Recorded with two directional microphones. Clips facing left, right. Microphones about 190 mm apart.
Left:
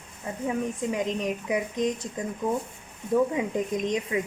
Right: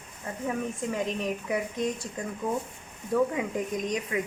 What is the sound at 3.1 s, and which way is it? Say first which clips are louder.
Speech: left 2 dB; 20° left (ahead or behind).